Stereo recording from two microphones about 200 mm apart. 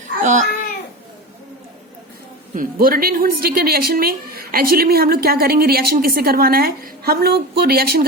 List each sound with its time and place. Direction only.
0.2 s a child's voice: 40° right (ahead or behind)
2.6 s speech: 45° right (ahead or behind)